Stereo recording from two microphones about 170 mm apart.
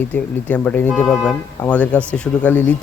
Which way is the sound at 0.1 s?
10° left (ahead or behind).